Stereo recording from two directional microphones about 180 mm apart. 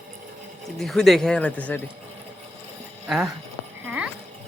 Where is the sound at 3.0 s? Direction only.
Centre (ahead or behind).